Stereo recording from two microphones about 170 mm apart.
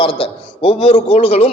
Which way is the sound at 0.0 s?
35° left (ahead or behind).